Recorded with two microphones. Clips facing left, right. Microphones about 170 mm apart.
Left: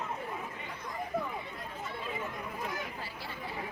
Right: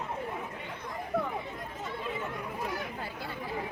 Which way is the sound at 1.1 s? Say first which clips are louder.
Right 4 dB; 70° right (ahead or behind).